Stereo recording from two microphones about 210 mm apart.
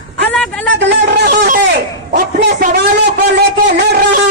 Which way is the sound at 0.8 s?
55° right (ahead or behind).